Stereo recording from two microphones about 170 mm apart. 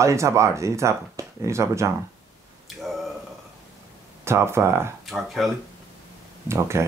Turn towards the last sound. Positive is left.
turn(degrees=-15)  # may be behind; listen again after turning